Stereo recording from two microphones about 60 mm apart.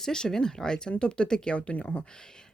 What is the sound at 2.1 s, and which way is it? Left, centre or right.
Speech, centre.